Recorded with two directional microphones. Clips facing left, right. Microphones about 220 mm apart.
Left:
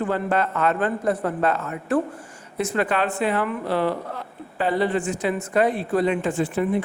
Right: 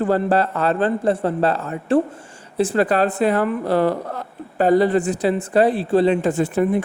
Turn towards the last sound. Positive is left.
turn(degrees=-40)  # may be behind; listen again after turning